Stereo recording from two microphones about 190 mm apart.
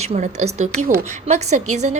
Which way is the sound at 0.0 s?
35° right (ahead or behind).